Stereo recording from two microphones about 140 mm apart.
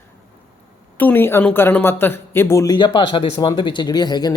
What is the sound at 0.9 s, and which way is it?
Speech, 15° left (ahead or behind).